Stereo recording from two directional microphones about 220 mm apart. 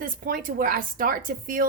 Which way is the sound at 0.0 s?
40° right (ahead or behind).